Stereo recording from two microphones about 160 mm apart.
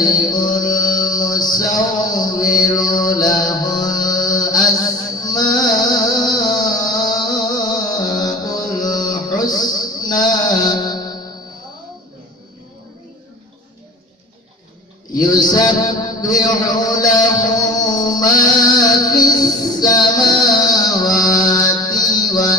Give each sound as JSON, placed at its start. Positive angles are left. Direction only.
{"t": 0.0, "sound": "mantra", "side_deg": 25}
{"t": 5.8, "sound": "music", "side_deg": 25}
{"t": 9.1, "sound": "a sound", "side_deg": 25}
{"t": 15.1, "sound": "mantra", "side_deg": 25}